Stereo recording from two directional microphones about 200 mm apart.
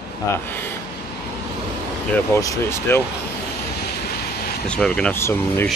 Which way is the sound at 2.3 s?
15° left (ahead or behind).